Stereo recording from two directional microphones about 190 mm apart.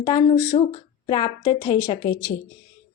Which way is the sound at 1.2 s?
20° left (ahead or behind).